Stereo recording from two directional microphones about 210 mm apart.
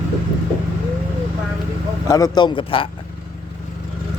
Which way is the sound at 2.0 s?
15° left (ahead or behind).